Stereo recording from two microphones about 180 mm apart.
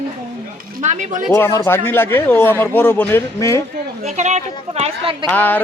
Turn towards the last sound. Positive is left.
turn(degrees=10)  # may be behind; listen again after turning